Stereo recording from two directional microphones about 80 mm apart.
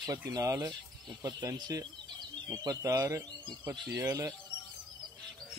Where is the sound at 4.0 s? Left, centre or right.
Right.